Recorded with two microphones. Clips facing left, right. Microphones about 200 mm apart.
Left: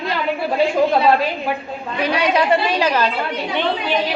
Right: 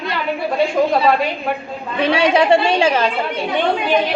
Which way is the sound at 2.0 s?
30° right (ahead or behind).